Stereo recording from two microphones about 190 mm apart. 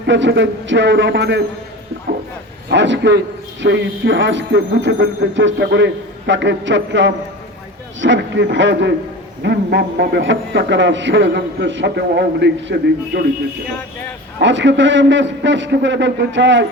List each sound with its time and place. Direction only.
0.1 s a man's voice: 70° right (ahead or behind)
2.6 s a man's voice: 70° right (ahead or behind)
14.3 s a man's voice: 70° right (ahead or behind)